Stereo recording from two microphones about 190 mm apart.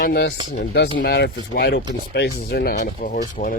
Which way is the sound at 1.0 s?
60° left (ahead or behind).